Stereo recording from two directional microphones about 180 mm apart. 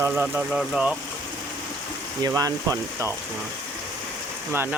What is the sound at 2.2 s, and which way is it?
Speech, 20° right (ahead or behind).